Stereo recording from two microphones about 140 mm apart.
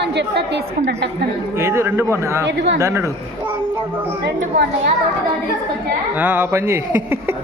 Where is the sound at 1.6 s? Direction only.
20° right (ahead or behind).